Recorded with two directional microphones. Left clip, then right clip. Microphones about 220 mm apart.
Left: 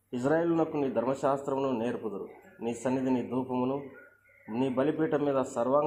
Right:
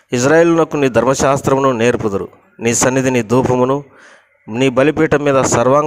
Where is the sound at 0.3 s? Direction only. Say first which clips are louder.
Right 16 dB; 50° right (ahead or behind).